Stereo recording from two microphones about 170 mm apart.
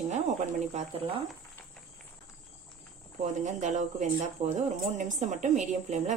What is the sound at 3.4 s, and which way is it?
Speech, 45° right (ahead or behind).